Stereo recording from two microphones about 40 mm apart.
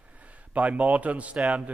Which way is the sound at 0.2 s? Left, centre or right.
Right.